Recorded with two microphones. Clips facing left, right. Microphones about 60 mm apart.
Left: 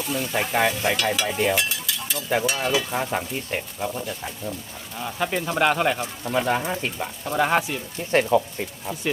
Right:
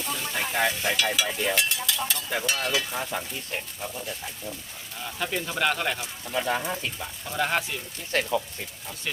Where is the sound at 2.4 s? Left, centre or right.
Centre.